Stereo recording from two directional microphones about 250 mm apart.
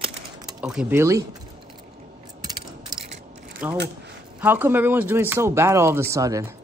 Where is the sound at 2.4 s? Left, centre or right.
Centre.